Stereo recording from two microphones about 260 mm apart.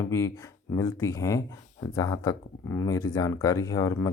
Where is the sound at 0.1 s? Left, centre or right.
Centre.